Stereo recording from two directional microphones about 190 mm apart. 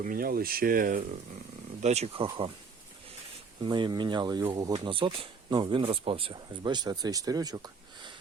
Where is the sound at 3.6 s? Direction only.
25° right (ahead or behind).